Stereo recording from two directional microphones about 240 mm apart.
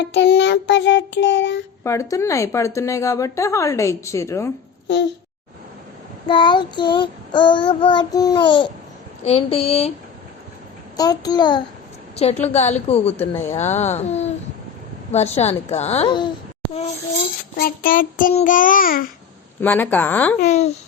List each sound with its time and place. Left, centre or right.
0.0 s child singing: left
1.8 s a woman's voice: centre
6.2 s child singing: centre
10.9 s a woman's voice: centre
12.1 s child singing: left
13.1 s a woman's voice: centre
13.6 s child singing: left
17.6 s child singing: left
19.6 s a woman's voice: centre
20.4 s child singing: left